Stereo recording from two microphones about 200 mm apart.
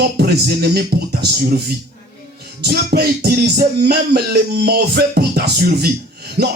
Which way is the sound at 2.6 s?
55° right (ahead or behind).